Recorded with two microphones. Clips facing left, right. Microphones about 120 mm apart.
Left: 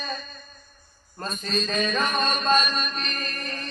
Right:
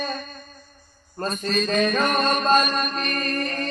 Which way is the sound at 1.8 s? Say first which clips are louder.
Right 4 dB; 60° right (ahead or behind).